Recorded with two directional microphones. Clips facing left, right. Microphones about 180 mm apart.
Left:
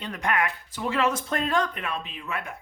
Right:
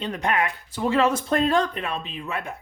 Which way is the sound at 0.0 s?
25° right (ahead or behind).